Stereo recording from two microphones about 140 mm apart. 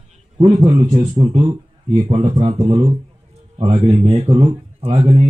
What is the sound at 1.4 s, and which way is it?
Speech, 45° right (ahead or behind).